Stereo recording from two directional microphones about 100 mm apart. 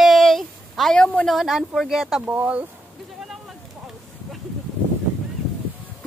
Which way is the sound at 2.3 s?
15° right (ahead or behind).